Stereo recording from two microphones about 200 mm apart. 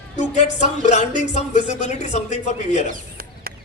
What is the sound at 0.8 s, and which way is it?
A man's voice, 35° left (ahead or behind).